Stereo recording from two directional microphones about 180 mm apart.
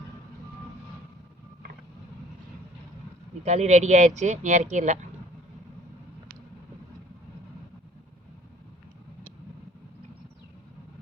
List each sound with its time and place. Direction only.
3.4 s speech: 40° right (ahead or behind)